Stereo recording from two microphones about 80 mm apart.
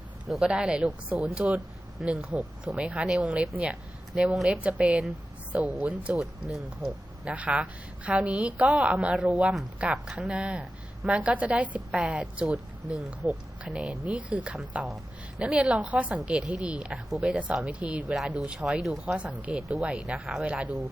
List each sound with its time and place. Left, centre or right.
0.3 s a woman's voice: centre
6.1 s speech: centre
7.3 s a woman's voice: centre
19.6 s speech: centre
20.4 s a woman's voice: centre